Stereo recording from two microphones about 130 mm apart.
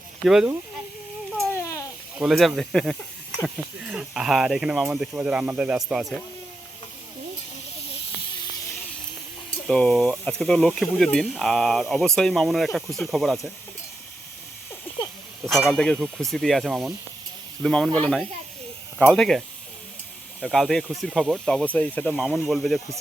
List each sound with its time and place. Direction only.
0.3 s speech: 5° right (ahead or behind)
1.5 s a sound: 25° left (ahead or behind)
2.1 s speech: 5° right (ahead or behind)
9.6 s speech: 5° left (ahead or behind)
15.7 s speech: 5° left (ahead or behind)
20.4 s speech: centre (ahead or behind)